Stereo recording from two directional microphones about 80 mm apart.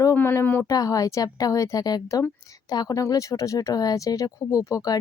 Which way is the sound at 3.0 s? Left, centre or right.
Left.